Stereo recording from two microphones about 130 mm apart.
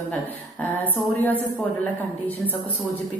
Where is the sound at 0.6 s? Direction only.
15° left (ahead or behind).